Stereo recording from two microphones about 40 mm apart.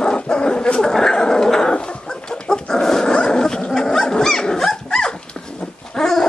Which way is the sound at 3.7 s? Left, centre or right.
Centre.